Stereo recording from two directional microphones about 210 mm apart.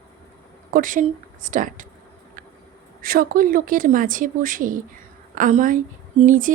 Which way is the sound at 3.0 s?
45° right (ahead or behind).